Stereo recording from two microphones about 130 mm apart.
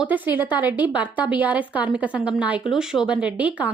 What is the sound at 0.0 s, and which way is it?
A woman's voice, 10° right (ahead or behind).